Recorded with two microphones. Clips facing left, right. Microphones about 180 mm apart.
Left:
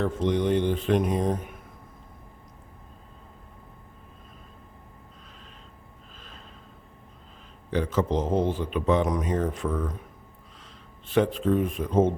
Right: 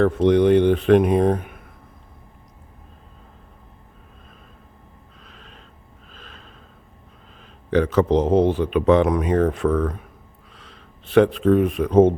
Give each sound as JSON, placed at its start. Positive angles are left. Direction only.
{"t": 0.0, "sound": "speech", "side_deg": -70}
{"t": 6.1, "sound": "snort", "side_deg": -70}
{"t": 7.7, "sound": "speech", "side_deg": -70}